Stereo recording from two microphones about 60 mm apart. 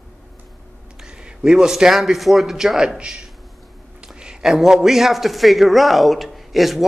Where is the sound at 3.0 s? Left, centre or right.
Centre.